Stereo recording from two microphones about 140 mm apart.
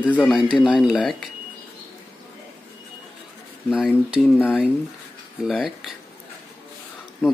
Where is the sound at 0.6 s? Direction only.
Centre (ahead or behind).